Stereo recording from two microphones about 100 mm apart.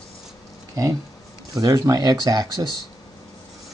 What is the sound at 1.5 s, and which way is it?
Speech, 35° right (ahead or behind).